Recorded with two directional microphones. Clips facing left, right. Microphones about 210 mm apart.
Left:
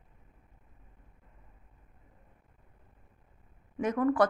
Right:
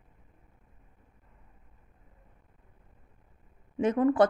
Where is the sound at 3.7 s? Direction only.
25° right (ahead or behind).